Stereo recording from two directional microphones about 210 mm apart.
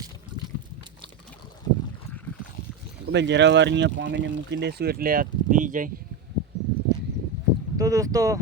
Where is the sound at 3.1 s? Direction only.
55° right (ahead or behind); by 5.9 s 40° right (ahead or behind).